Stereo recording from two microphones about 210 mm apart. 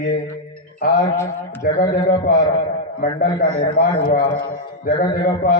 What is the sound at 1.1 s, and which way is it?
Speech, 10° left (ahead or behind).